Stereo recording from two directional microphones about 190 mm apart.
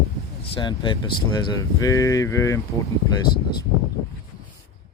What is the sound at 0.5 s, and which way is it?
Speech, 25° left (ahead or behind).